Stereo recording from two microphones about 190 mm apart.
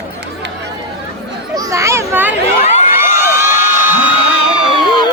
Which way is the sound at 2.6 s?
35° left (ahead or behind).